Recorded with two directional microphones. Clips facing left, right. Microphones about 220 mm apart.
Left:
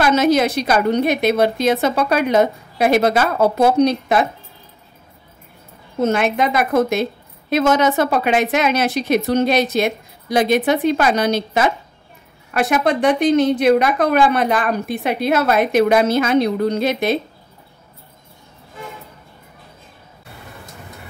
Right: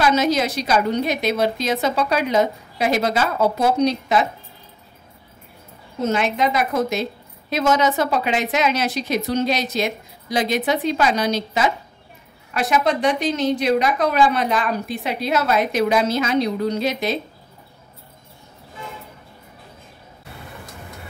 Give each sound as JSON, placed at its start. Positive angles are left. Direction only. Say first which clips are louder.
{"t": 0.0, "sound": "a woman's voice", "louder": "left 4 dB", "side_deg": 55}
{"t": 6.0, "sound": "a woman's voice", "louder": "left 3 dB", "side_deg": 55}